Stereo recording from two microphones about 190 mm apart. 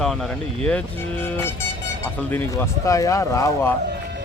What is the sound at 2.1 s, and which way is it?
Speech, 10° left (ahead or behind).